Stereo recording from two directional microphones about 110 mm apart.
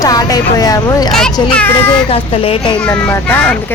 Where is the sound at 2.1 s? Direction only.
60° left (ahead or behind).